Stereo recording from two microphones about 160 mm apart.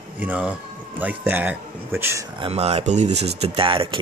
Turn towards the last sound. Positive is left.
turn(degrees=-35)  # may be behind; listen again after turning